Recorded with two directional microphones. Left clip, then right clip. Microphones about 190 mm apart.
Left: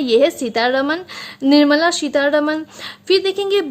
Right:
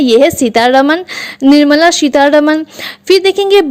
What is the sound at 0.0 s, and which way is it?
A woman's voice, 40° right (ahead or behind).